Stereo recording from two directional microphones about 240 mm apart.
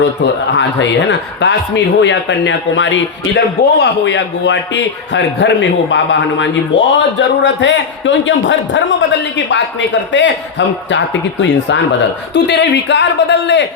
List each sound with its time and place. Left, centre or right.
0.5 s speech: left